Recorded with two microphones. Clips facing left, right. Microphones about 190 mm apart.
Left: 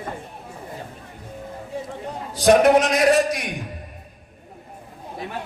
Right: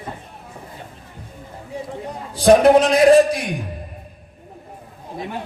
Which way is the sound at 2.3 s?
30° right (ahead or behind).